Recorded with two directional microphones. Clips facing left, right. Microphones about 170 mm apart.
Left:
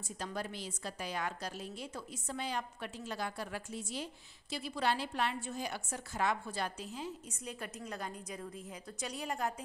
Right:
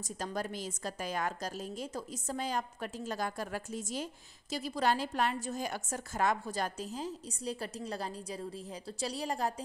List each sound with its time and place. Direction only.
0.2 s a woman's voice: 45° right (ahead or behind)